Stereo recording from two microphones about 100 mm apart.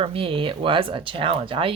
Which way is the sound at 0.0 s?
70° right (ahead or behind).